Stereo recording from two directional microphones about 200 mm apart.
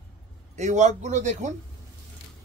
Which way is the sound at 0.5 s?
35° right (ahead or behind).